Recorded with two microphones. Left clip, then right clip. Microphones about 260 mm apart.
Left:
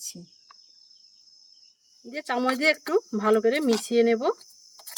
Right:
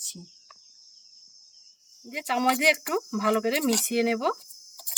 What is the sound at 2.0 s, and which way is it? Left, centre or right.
A woman's voice, centre.